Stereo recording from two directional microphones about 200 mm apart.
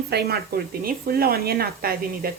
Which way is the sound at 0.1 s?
50° right (ahead or behind).